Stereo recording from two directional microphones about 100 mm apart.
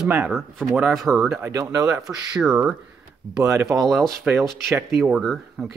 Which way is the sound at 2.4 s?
10° right (ahead or behind).